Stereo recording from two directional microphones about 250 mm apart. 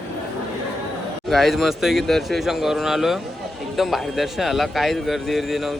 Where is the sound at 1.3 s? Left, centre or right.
Centre.